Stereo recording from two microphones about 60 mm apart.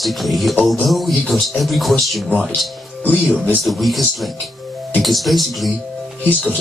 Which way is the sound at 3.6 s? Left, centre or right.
Centre.